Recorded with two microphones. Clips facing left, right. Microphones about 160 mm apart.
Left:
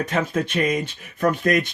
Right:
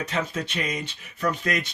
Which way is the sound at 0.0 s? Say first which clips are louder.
Left 6 dB; 50° left (ahead or behind).